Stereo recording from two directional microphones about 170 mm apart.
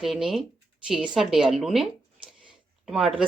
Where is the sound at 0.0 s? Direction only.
Centre (ahead or behind).